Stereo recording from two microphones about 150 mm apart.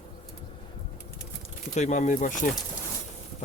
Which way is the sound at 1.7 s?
50° left (ahead or behind).